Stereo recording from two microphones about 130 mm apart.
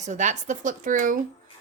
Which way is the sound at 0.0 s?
65° right (ahead or behind).